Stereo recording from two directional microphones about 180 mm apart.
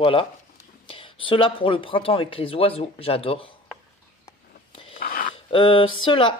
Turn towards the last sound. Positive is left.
turn(degrees=30)  # may be behind; listen again after turning